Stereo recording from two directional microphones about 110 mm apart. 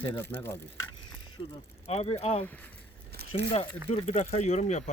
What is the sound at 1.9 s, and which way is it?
Speech, 70° left (ahead or behind).